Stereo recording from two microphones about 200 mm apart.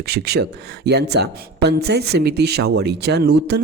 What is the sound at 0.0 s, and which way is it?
Speech, 55° right (ahead or behind).